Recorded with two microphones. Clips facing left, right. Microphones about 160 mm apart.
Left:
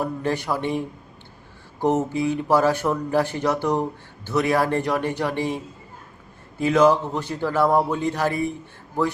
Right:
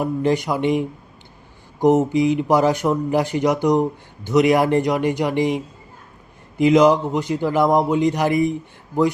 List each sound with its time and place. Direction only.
0.0 s speech: 15° right (ahead or behind)